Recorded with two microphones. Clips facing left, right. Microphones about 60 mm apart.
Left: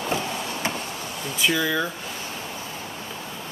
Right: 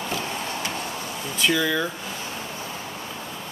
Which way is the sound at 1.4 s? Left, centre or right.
Centre.